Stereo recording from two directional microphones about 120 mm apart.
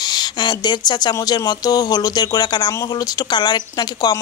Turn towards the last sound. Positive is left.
turn(degrees=35)  # may be behind; listen again after turning